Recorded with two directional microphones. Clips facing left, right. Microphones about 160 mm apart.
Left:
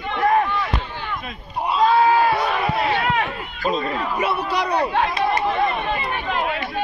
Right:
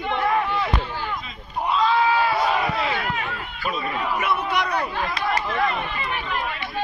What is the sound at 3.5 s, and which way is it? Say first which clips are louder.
Speech: left 5 dB; 35° left (ahead or behind).